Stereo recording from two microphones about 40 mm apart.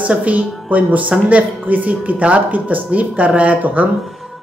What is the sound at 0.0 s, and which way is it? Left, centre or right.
Speech, right.